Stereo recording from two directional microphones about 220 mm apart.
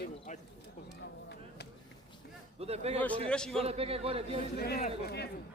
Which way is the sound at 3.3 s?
5° left (ahead or behind).